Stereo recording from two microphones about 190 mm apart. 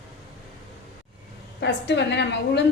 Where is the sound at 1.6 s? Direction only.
65° left (ahead or behind).